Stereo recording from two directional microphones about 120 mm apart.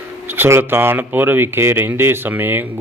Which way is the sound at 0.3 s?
20° right (ahead or behind).